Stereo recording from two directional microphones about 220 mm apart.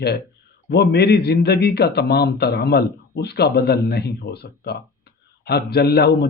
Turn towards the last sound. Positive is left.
turn(degrees=45)  # may be behind; listen again after turning